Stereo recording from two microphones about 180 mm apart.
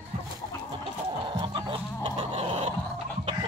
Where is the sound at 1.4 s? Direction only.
25° right (ahead or behind).